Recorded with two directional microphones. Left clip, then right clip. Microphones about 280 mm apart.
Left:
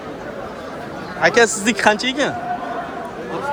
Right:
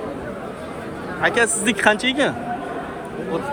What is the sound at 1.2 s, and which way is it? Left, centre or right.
Speech, centre.